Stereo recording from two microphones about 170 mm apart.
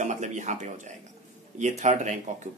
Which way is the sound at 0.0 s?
45° right (ahead or behind).